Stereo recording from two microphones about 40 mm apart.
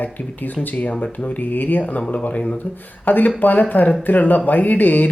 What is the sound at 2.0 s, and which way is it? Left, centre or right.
Speech, left.